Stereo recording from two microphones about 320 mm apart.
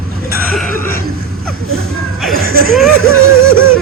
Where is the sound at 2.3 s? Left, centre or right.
Right.